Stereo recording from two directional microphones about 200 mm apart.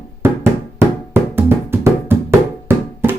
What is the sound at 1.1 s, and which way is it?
Music, 10° right (ahead or behind).